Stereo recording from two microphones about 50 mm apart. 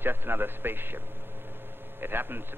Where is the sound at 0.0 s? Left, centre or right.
Right.